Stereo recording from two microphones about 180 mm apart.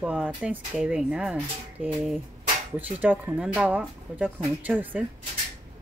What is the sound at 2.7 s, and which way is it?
Speech, 10° right (ahead or behind).